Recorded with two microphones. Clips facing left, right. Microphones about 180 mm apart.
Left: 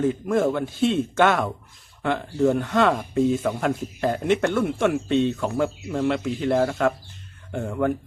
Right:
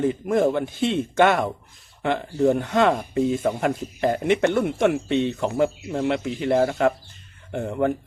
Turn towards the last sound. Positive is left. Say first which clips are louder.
# right 1 dB
turn(degrees=-20)  # may be behind; listen again after turning